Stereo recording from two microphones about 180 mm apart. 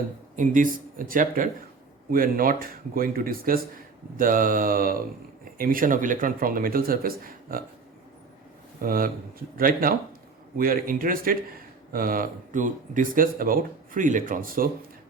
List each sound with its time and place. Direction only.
0.3 s speech: 45° right (ahead or behind)
8.8 s speech: 50° right (ahead or behind)